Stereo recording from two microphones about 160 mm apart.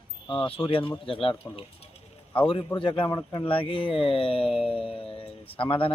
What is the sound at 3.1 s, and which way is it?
Speech, 20° left (ahead or behind).